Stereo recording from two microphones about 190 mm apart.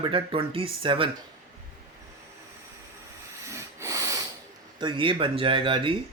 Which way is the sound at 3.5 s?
15° right (ahead or behind).